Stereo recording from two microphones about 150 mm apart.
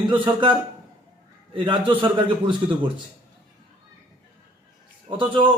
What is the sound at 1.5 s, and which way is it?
Speech, 35° right (ahead or behind).